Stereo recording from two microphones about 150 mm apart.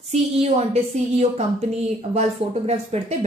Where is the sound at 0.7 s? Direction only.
45° right (ahead or behind).